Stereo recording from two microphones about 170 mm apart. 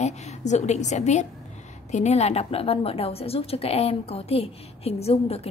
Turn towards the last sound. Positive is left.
turn(degrees=35)  # may be behind; listen again after turning